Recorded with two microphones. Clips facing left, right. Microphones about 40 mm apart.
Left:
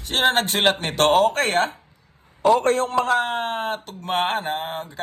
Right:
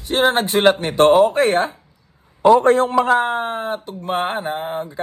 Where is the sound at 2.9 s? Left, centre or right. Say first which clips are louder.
Right 4 dB; right.